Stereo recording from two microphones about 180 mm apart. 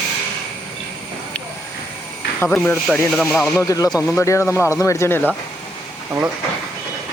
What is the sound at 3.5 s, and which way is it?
Speech, 20° left (ahead or behind).